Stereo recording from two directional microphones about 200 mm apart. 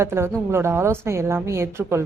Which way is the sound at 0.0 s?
10° right (ahead or behind).